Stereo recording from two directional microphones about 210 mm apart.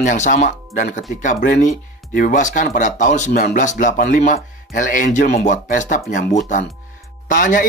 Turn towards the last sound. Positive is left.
turn(degrees=40)  # may be behind; listen again after turning